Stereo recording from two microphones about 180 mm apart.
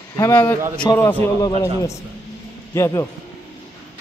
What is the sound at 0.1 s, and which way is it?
A man's voice, 20° left (ahead or behind).